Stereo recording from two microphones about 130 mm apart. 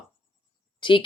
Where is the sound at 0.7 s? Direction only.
40° left (ahead or behind).